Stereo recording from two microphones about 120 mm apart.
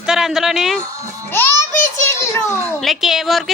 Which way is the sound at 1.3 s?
20° left (ahead or behind).